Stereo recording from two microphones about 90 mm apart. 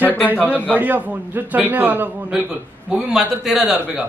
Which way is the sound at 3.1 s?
5° right (ahead or behind).